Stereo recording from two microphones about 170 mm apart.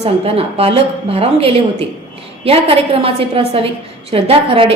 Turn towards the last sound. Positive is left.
turn(degrees=-30)  # may be behind; listen again after turning